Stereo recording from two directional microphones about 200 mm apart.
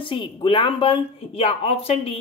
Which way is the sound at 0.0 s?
25° left (ahead or behind).